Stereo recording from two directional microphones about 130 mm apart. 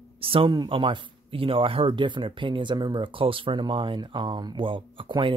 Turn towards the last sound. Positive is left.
turn(degrees=-40)  # may be behind; listen again after turning